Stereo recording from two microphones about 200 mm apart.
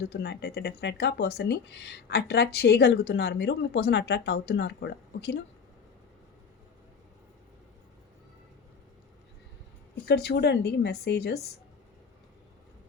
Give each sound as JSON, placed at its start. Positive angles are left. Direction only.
{"t": 0.0, "sound": "speech", "side_deg": 55}
{"t": 9.9, "sound": "speech", "side_deg": 55}